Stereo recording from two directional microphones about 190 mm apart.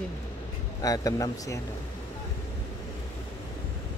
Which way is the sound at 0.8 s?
20° left (ahead or behind).